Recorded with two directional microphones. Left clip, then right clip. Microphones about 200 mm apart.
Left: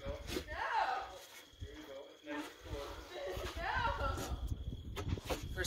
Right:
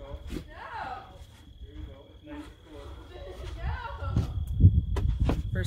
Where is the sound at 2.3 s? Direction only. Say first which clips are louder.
Even; 20° left (ahead or behind).